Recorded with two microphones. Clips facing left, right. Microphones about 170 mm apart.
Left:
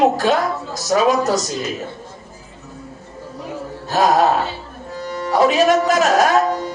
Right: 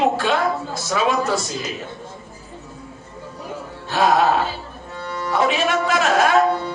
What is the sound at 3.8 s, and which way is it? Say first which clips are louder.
Music: left 2 dB; 40° left (ahead or behind).